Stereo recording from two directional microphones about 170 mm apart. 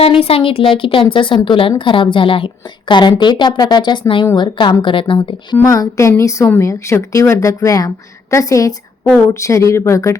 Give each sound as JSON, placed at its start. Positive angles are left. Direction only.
{"t": 0.0, "sound": "a woman's voice", "side_deg": 35}